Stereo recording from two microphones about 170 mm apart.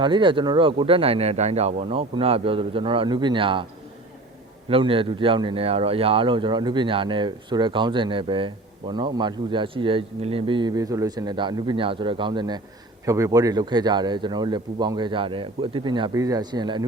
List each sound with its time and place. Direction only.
0.0 s speech: 30° right (ahead or behind)
4.7 s a man's voice: 30° right (ahead or behind)